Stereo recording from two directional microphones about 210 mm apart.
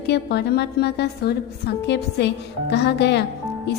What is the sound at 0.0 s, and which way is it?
A woman's voice, 50° left (ahead or behind).